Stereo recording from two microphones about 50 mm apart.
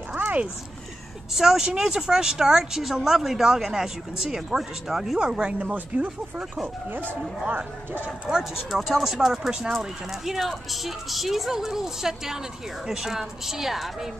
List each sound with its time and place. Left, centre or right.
1.3 s speech: centre
5.2 s speech: centre; by 8.0 s right
8.3 s a woman's voice: centre